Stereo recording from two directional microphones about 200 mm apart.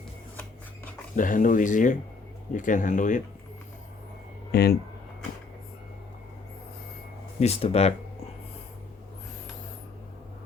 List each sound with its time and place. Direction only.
1.1 s speech: 40° left (ahead or behind)
4.5 s speech: 50° left (ahead or behind)
7.3 s speech: 30° left (ahead or behind)